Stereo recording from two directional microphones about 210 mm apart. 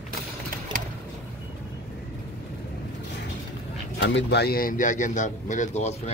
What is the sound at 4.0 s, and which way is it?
A man's voice, 55° left (ahead or behind).